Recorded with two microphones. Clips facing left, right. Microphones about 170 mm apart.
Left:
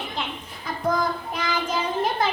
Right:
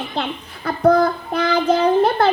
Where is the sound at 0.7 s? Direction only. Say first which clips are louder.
Right 10 dB; 65° right (ahead or behind).